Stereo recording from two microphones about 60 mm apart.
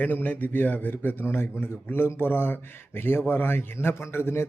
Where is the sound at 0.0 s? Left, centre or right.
Left.